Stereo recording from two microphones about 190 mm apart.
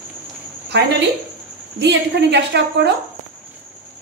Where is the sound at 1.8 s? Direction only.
65° right (ahead or behind).